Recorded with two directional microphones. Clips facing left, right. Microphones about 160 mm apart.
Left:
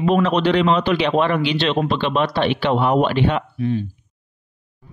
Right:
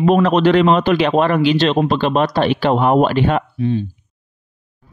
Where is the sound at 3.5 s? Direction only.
25° right (ahead or behind).